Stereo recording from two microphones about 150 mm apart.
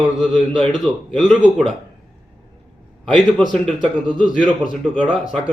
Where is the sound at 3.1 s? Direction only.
5° left (ahead or behind).